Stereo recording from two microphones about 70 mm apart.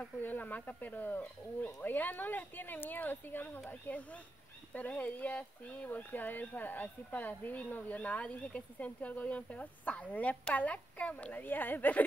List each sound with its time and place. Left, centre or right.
0.2 s speech: left